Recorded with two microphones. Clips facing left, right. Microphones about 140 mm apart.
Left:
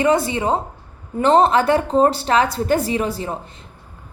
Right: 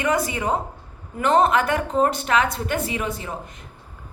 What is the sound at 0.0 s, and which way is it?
A woman's voice, 30° left (ahead or behind).